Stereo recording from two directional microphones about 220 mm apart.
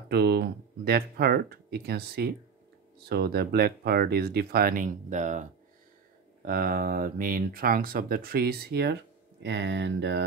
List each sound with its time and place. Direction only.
0.1 s speech: 45° right (ahead or behind)